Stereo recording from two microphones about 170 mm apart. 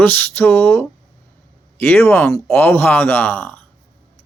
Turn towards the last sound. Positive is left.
turn(degrees=10)  # may be behind; listen again after turning